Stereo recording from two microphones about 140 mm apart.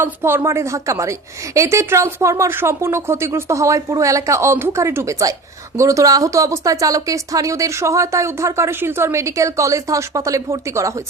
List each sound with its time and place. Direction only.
0.0 s speech: 15° right (ahead or behind)